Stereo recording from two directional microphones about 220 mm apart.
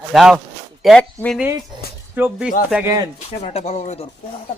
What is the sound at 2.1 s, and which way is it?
Speech, 10° right (ahead or behind).